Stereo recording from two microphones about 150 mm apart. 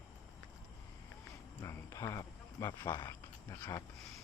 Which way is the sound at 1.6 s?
20° left (ahead or behind).